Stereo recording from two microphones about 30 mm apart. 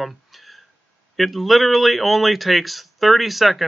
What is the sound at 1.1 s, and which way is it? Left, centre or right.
Speech, centre.